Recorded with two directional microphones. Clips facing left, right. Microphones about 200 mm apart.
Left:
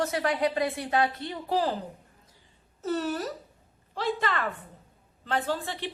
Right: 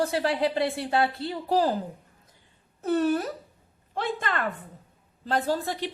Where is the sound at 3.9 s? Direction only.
50° right (ahead or behind).